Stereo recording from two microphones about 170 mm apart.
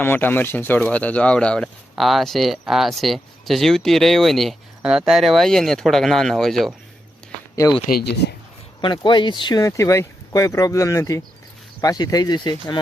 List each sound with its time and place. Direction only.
0.0 s speech: 10° left (ahead or behind)
7.9 s speech: 65° left (ahead or behind)
8.8 s speech: 25° left (ahead or behind)